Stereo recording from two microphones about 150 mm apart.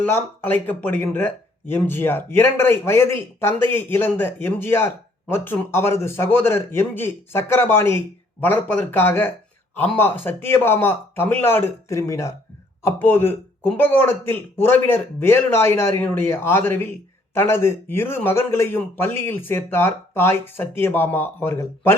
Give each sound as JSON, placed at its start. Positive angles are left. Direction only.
{"t": 0.1, "sound": "speech", "side_deg": 15}